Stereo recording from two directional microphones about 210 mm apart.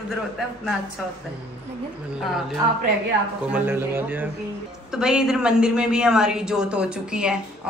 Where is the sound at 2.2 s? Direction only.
Centre (ahead or behind).